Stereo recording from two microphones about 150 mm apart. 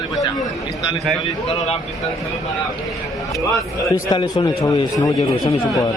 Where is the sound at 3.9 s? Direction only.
25° left (ahead or behind).